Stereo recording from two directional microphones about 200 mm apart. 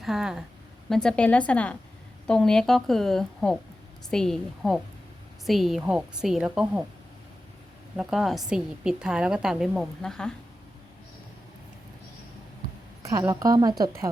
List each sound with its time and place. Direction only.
0.0 s a woman's voice: centre (ahead or behind)
7.9 s a woman's voice: centre (ahead or behind)
13.0 s a woman's voice: 15° right (ahead or behind)